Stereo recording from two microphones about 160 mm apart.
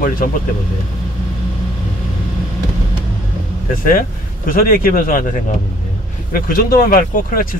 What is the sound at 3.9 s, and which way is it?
Speech, 60° left (ahead or behind).